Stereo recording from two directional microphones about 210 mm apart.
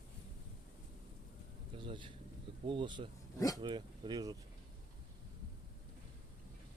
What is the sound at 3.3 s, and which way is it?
Speech, 15° left (ahead or behind).